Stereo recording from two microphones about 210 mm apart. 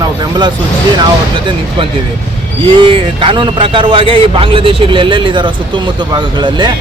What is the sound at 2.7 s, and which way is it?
Speech, 25° right (ahead or behind).